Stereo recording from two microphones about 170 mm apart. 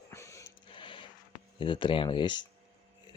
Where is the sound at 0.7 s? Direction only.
30° left (ahead or behind).